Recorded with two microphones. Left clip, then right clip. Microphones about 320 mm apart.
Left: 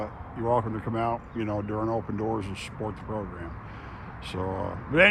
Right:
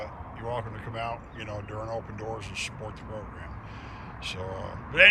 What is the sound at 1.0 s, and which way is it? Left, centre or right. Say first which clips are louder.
Speech: left 5 dB; centre.